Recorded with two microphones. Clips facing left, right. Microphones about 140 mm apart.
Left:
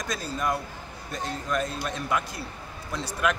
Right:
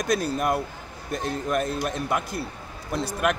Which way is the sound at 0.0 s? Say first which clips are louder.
Right 6 dB; 65° right (ahead or behind).